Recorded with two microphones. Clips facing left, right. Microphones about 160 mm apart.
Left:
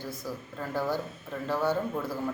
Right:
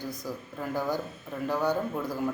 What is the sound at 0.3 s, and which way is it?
Speech, 15° right (ahead or behind).